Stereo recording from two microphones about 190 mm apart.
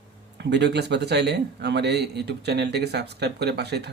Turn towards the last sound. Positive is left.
turn(degrees=-60)  # may be behind; listen again after turning